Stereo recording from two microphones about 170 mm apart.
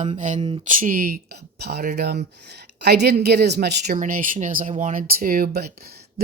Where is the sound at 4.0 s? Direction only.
55° right (ahead or behind).